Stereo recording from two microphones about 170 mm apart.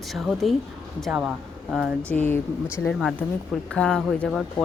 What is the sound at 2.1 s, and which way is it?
Speech, 10° left (ahead or behind).